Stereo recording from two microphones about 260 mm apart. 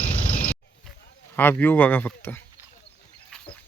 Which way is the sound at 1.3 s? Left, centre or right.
Centre.